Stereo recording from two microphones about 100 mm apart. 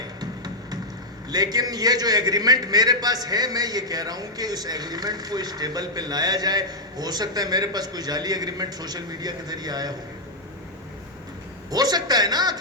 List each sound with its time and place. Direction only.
0.2 s music: 40° right (ahead or behind)
1.3 s a man's voice: 40° right (ahead or behind)
11.7 s a man's voice: 40° right (ahead or behind)